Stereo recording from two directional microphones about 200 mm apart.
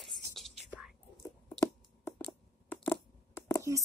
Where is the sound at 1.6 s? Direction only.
10° left (ahead or behind).